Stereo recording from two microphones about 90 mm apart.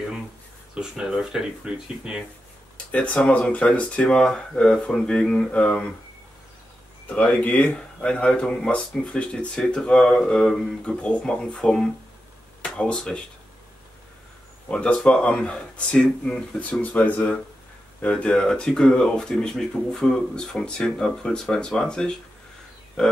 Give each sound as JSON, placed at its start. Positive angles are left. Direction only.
{"t": 0.7, "sound": "speech", "side_deg": -10}
{"t": 2.9, "sound": "speech", "side_deg": 10}
{"t": 7.1, "sound": "speech", "side_deg": 15}
{"t": 14.7, "sound": "speech", "side_deg": 10}